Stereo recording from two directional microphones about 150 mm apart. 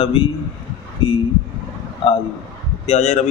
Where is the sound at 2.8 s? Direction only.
50° left (ahead or behind).